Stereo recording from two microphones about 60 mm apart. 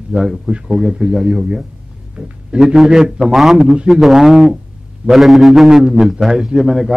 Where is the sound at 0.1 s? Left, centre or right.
Centre.